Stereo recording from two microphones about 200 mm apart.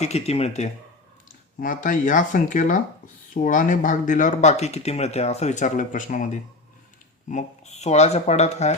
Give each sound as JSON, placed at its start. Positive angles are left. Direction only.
{"t": 0.0, "sound": "speech", "side_deg": 30}